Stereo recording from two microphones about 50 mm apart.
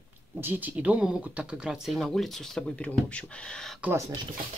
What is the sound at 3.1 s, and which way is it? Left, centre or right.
Speech, centre.